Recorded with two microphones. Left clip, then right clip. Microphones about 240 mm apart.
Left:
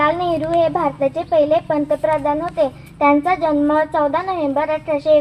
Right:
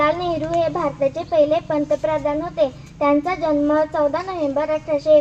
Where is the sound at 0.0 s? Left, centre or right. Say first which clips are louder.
Left 2 dB; left.